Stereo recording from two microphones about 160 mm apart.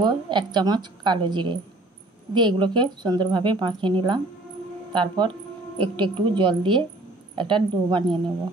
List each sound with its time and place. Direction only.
0.0 s a woman's voice: 30° right (ahead or behind)